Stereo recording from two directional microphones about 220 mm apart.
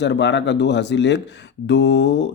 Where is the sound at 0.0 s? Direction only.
50° left (ahead or behind).